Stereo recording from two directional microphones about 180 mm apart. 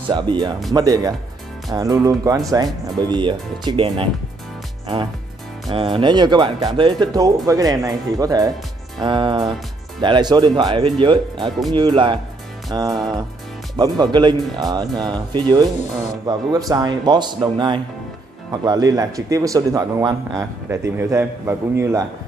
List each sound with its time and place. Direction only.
0.1 s speech: 25° right (ahead or behind)
5.7 s speech: 30° right (ahead or behind)